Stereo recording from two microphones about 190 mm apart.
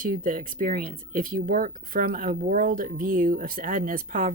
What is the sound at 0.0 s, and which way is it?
Speech, 45° right (ahead or behind).